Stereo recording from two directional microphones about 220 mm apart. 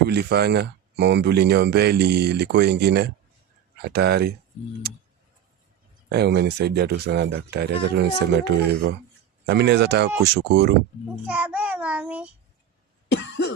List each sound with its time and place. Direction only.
0.0 s speech: 45° right (ahead or behind)
6.1 s speech: 50° right (ahead or behind)
11.3 s child singing: 5° right (ahead or behind)
13.1 s cough: 55° left (ahead or behind)